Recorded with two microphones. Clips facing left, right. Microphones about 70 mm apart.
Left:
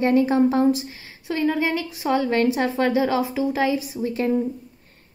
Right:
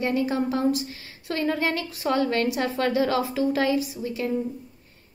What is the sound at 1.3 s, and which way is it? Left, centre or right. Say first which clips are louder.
A woman's voice: left 3 dB; centre.